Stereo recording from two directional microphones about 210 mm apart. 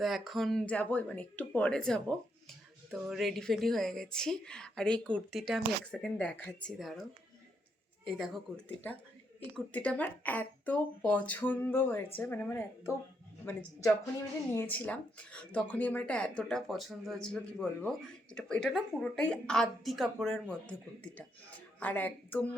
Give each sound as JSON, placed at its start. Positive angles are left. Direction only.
{"t": 0.0, "sound": "speech", "side_deg": 0}
{"t": 9.6, "sound": "speech", "side_deg": 5}
{"t": 21.8, "sound": "speech", "side_deg": 10}